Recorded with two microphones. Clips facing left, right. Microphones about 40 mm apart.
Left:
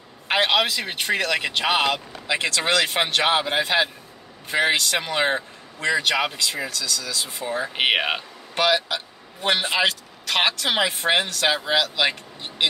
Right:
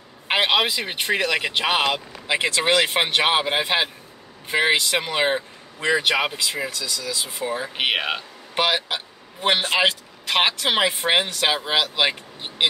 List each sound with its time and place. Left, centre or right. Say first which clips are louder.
0.3 s speech: even; centre
2.2 s speech: right 2 dB; right
7.4 s speech: even; centre
7.7 s speech: left 3 dB; centre
8.5 s speech: left 1 dB; centre